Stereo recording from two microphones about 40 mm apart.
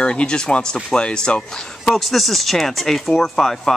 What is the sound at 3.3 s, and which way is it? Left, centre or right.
Speech, centre.